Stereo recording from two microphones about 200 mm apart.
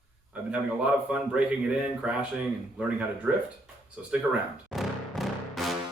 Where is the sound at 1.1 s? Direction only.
5° right (ahead or behind).